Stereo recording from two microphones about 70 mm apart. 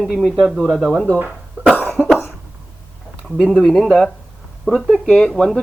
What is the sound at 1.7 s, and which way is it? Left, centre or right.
Cough, left.